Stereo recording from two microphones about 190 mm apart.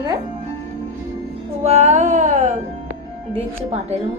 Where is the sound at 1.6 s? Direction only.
35° right (ahead or behind).